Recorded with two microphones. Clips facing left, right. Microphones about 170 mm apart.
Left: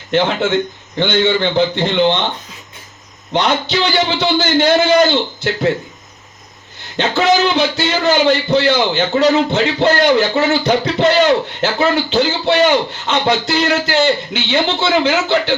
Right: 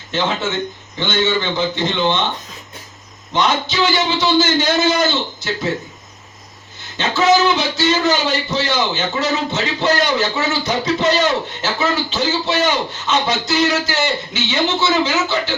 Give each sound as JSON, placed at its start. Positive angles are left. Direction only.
{"t": 0.9, "sound": "a man's voice", "side_deg": 60}
{"t": 3.3, "sound": "a man's voice", "side_deg": 60}
{"t": 6.9, "sound": "a man's voice", "side_deg": 60}